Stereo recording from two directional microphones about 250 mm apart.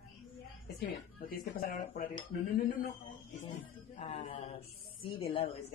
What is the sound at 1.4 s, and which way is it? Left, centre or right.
Speech, left.